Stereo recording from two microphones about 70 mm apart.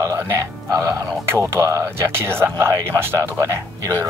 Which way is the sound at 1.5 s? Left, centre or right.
Right.